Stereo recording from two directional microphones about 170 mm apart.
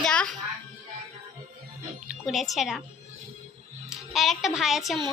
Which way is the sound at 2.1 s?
Centre (ahead or behind).